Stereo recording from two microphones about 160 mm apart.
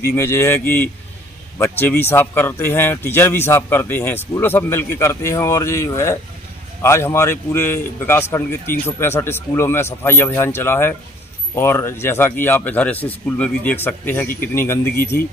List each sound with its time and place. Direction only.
0.1 s speech: 15° left (ahead or behind)